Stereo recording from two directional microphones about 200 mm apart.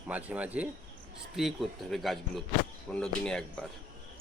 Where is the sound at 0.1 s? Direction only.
5° right (ahead or behind).